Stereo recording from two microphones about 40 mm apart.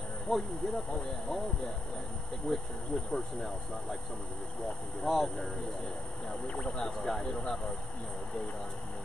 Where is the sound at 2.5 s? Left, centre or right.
Left.